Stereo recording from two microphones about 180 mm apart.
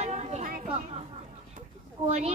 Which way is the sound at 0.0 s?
40° right (ahead or behind).